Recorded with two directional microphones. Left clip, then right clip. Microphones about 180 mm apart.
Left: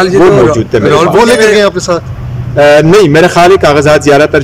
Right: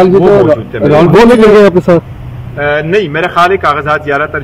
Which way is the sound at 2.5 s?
40° left (ahead or behind).